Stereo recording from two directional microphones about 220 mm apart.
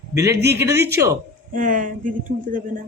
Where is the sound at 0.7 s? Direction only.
50° right (ahead or behind).